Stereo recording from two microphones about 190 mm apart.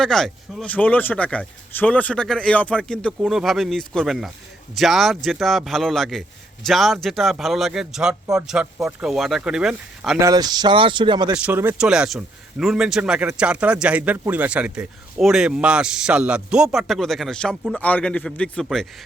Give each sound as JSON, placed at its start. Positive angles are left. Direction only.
{"t": 0.0, "sound": "a man's voice", "side_deg": 5}
{"t": 10.2, "sound": "speech", "side_deg": -20}
{"t": 11.3, "sound": "a man's voice", "side_deg": -10}